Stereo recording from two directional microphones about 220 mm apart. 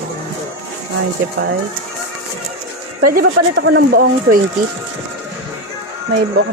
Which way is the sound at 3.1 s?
45° right (ahead or behind).